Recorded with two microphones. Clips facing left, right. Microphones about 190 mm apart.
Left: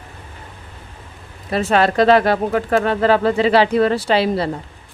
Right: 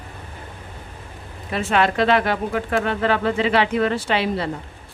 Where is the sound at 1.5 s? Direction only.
40° left (ahead or behind).